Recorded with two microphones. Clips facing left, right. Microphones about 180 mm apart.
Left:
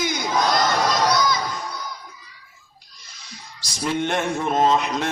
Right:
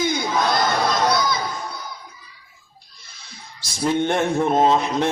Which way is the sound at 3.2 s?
55° right (ahead or behind).